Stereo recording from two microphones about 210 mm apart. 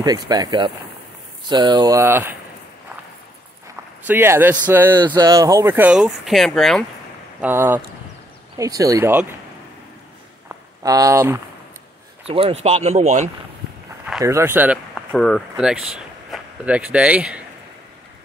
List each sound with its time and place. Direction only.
0.0 s speech: 20° right (ahead or behind)
4.1 s speech: 10° right (ahead or behind)
7.3 s speech: 10° right (ahead or behind)
10.8 s speech: 15° right (ahead or behind)
12.3 s speech: 25° right (ahead or behind)
14.2 s speech: 10° right (ahead or behind)
15.1 s speech: 5° left (ahead or behind)